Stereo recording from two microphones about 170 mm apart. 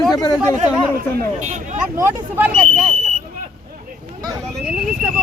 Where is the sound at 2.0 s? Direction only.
15° right (ahead or behind).